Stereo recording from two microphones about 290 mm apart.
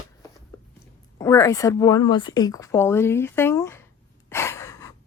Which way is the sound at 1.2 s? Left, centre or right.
Centre.